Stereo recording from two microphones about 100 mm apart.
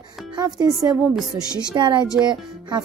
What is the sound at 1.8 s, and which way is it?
Speech, 50° right (ahead or behind).